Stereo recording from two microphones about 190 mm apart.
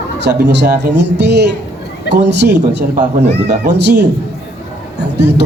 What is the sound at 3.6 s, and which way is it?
Speech, 60° right (ahead or behind).